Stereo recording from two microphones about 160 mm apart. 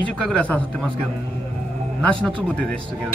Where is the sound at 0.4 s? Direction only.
10° left (ahead or behind).